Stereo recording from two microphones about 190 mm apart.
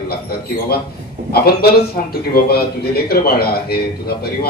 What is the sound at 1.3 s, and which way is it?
A man's voice, 55° left (ahead or behind).